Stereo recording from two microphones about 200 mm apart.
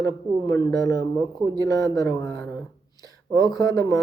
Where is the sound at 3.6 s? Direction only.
20° left (ahead or behind).